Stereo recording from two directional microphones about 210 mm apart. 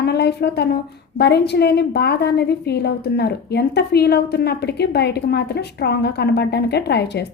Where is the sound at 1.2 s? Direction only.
50° left (ahead or behind).